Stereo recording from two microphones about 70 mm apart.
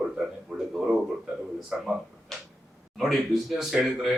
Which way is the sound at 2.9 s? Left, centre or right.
Centre.